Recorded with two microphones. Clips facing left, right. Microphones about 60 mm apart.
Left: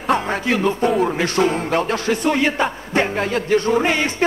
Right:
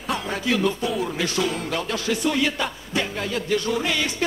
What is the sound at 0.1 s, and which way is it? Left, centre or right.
Music, left.